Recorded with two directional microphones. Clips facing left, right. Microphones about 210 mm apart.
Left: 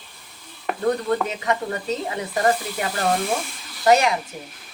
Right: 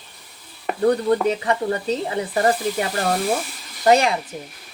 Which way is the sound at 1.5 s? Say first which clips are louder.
Right 3 dB; 35° right (ahead or behind).